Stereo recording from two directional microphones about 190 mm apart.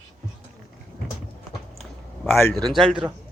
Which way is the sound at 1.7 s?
Centre (ahead or behind).